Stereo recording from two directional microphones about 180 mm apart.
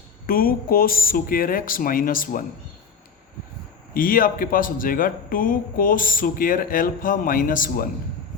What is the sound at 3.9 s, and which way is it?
Speech, 50° left (ahead or behind).